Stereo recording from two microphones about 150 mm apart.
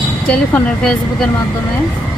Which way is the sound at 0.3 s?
5° left (ahead or behind).